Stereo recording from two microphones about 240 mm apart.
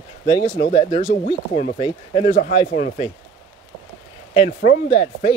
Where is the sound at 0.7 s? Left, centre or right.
Left.